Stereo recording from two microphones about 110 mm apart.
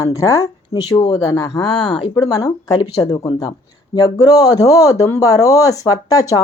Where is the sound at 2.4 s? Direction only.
35° left (ahead or behind).